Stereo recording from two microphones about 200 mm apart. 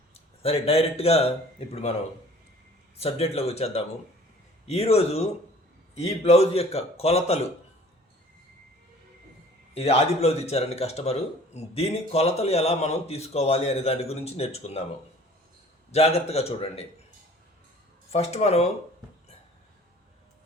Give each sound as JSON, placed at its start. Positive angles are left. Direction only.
{"t": 0.1, "sound": "speech", "side_deg": 30}
{"t": 3.0, "sound": "a man's voice", "side_deg": 30}
{"t": 9.7, "sound": "a man's voice", "side_deg": 30}
{"t": 15.9, "sound": "a man's voice", "side_deg": 30}
{"t": 18.1, "sound": "a man's voice", "side_deg": 30}